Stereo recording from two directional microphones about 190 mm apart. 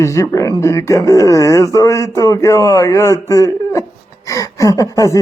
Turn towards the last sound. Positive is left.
turn(degrees=15)  # may be behind; listen again after turning